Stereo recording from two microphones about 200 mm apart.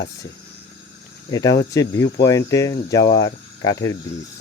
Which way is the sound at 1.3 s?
15° left (ahead or behind).